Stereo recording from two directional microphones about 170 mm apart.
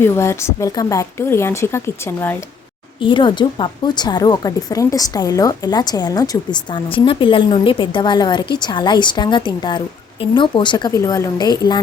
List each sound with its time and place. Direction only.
0.0 s speech: 15° left (ahead or behind)
3.0 s a woman's voice: 30° left (ahead or behind)